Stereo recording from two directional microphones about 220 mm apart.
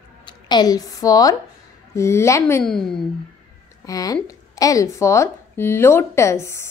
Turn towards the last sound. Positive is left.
turn(degrees=10)  # may be behind; listen again after turning